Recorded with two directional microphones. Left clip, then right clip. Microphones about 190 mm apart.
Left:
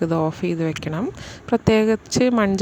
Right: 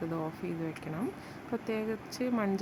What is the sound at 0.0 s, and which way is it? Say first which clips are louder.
Speech: left 15 dB; 40° left (ahead or behind).